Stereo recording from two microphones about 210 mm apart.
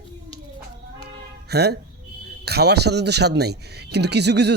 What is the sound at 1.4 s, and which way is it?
Speech, 50° right (ahead or behind).